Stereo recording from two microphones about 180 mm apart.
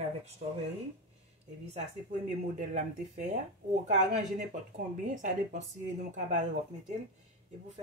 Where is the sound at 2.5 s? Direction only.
45° right (ahead or behind).